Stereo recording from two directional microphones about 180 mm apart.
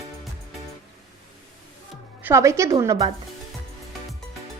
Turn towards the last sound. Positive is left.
turn(degrees=-20)  # may be behind; listen again after turning